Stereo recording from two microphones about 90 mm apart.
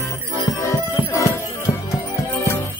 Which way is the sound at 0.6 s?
35° left (ahead or behind).